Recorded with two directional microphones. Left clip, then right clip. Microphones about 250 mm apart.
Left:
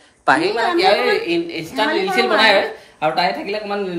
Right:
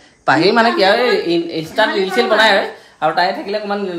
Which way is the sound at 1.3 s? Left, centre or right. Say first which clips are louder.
Right 4 dB; centre.